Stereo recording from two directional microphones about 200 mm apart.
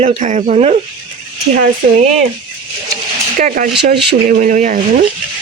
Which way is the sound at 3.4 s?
45° right (ahead or behind).